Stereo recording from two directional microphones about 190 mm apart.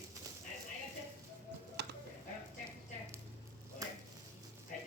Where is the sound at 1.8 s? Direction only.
60° right (ahead or behind).